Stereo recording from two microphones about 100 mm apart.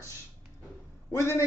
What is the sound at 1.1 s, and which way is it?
Speech, 25° left (ahead or behind).